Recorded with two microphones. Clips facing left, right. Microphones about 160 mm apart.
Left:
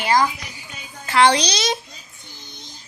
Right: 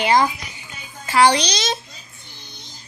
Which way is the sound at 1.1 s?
Centre (ahead or behind).